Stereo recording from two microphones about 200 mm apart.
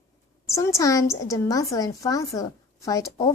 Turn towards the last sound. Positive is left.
turn(degrees=15)  # may be behind; listen again after turning